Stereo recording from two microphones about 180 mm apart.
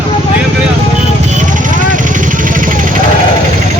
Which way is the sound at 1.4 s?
45° right (ahead or behind).